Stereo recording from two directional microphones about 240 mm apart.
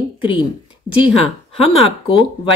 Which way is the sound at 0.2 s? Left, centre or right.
Left.